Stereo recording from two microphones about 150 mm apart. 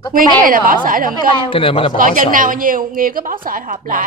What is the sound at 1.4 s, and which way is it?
Speech, 35° left (ahead or behind).